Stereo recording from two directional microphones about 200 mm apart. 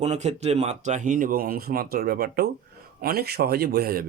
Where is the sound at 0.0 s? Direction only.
35° right (ahead or behind).